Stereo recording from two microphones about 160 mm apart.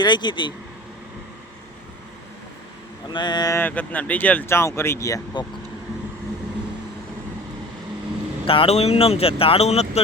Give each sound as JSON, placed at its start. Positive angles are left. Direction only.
{"t": 0.0, "sound": "speech", "side_deg": 30}
{"t": 3.1, "sound": "speech", "side_deg": 25}
{"t": 8.4, "sound": "speech", "side_deg": 35}